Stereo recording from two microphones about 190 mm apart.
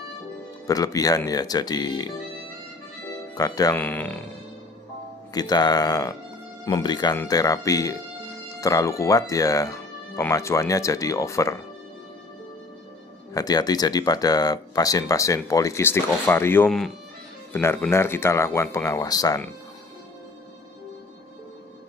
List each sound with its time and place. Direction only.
0.7 s speech: 20° left (ahead or behind)
3.3 s speech: 20° left (ahead or behind)
3.7 s speech: 10° left (ahead or behind)
5.3 s speech: 20° left (ahead or behind)
13.3 s speech: 20° left (ahead or behind)